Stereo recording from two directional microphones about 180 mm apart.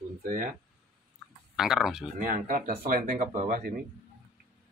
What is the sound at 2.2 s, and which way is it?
Speech, 50° right (ahead or behind).